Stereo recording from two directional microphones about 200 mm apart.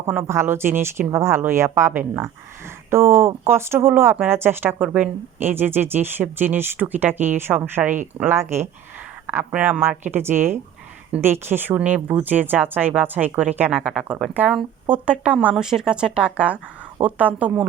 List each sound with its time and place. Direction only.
0.0 s speech: 10° right (ahead or behind)